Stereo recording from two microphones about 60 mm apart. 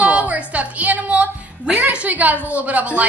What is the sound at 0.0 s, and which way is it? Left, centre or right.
Music, right.